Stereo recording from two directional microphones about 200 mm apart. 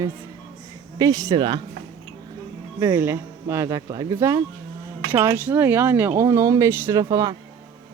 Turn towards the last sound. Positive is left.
turn(degrees=-20)  # may be behind; listen again after turning